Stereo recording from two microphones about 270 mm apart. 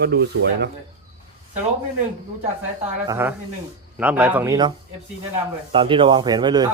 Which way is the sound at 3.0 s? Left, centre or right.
Centre.